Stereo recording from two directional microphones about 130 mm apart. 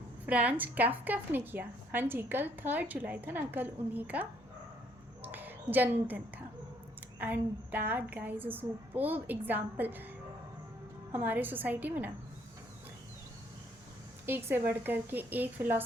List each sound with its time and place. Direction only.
0.3 s a woman's voice: 10° right (ahead or behind)
5.2 s a sound: 15° right (ahead or behind)
7.2 s a woman's voice: 15° right (ahead or behind)
11.1 s a woman's voice: 15° right (ahead or behind)
14.3 s a woman's voice: 15° right (ahead or behind)